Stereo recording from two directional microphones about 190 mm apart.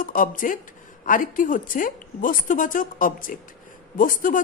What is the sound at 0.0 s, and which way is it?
Speech, 45° left (ahead or behind).